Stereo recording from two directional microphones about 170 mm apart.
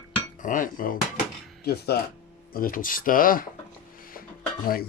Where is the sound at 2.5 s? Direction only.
55° left (ahead or behind).